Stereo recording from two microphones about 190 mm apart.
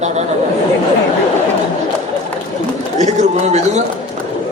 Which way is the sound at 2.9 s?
35° right (ahead or behind).